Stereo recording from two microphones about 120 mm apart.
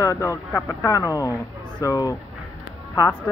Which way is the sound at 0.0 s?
25° left (ahead or behind).